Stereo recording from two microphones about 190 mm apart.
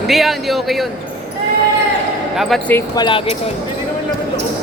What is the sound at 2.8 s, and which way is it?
Speech, 20° left (ahead or behind).